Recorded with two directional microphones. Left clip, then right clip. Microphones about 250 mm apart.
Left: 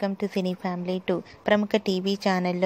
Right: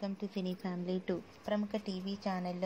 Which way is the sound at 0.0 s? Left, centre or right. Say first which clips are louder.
Left 13 dB; left.